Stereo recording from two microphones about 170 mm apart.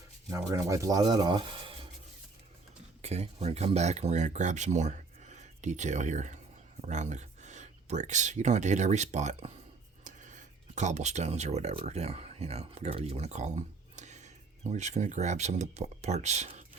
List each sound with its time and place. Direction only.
0.3 s speech: 20° right (ahead or behind)
3.0 s speech: 40° right (ahead or behind)